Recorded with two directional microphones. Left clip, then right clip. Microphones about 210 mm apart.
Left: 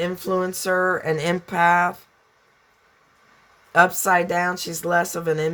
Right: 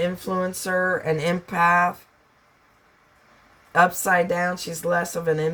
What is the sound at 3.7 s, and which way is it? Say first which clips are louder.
Speech: left 2 dB; 45° left (ahead or behind).